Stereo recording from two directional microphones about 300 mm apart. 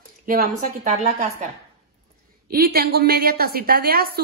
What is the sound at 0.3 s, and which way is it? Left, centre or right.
A woman's voice, right.